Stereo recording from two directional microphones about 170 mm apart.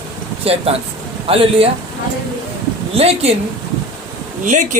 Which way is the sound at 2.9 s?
35° right (ahead or behind).